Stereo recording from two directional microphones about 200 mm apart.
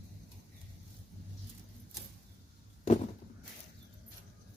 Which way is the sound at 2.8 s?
35° left (ahead or behind).